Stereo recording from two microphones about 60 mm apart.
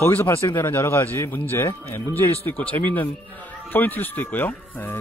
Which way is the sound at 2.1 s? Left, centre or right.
Left.